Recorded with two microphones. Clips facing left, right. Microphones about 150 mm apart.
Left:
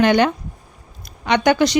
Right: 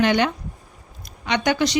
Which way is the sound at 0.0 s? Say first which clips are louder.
Left 4 dB; 50° left (ahead or behind).